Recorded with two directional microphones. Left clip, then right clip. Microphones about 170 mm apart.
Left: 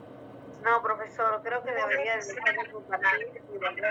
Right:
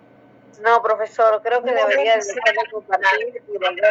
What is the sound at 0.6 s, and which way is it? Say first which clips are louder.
A man's voice: right 10 dB; 55° right (ahead or behind).